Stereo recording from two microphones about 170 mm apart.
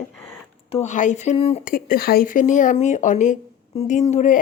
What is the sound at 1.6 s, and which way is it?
A woman's voice, 60° left (ahead or behind).